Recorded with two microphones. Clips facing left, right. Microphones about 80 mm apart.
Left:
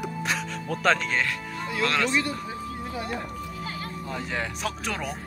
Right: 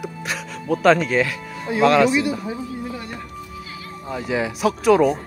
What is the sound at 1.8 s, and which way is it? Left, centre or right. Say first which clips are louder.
Speech: right 10 dB; centre.